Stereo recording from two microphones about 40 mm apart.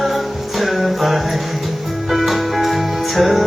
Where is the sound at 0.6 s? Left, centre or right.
Centre.